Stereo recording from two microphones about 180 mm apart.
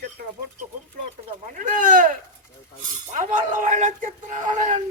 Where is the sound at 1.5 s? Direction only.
45° right (ahead or behind).